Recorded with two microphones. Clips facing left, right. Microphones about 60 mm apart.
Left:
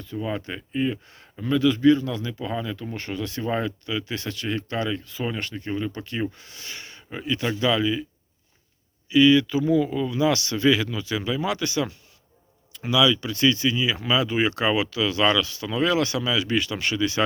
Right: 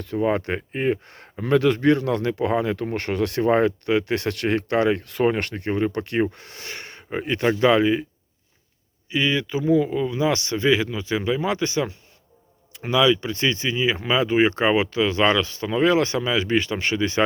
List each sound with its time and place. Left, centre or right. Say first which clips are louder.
0.0 s speech: right 7 dB; right
9.0 s speech: left 6 dB; right